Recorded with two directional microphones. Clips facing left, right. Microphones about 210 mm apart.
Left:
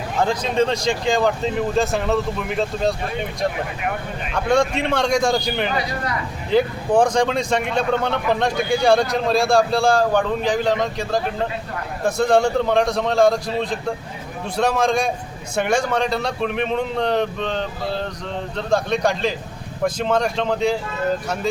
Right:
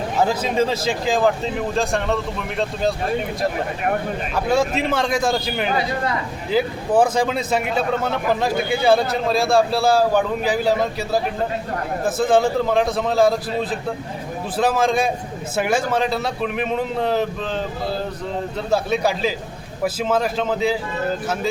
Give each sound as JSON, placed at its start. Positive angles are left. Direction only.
{"t": 0.2, "sound": "speech", "side_deg": -5}
{"t": 4.4, "sound": "speech", "side_deg": -5}